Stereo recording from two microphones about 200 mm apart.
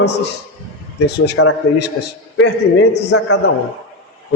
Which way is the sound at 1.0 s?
60° left (ahead or behind).